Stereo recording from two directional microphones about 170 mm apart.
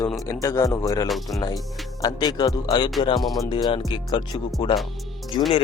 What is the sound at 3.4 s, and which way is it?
Speech, 25° left (ahead or behind).